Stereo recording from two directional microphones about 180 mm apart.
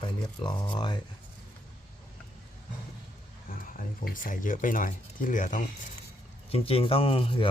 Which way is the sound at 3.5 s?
50° left (ahead or behind).